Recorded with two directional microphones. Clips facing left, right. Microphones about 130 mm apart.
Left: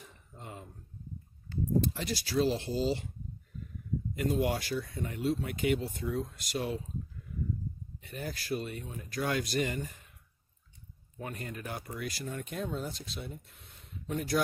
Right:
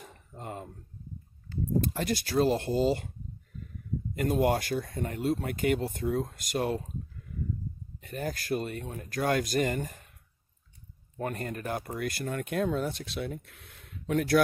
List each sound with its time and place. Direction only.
0.0 s a sound: 50° right (ahead or behind)
1.8 s speech: 50° right (ahead or behind)
4.1 s speech: 50° right (ahead or behind)
8.0 s speech: 50° right (ahead or behind)
11.1 s speech: 50° right (ahead or behind); by 14.4 s 70° right (ahead or behind)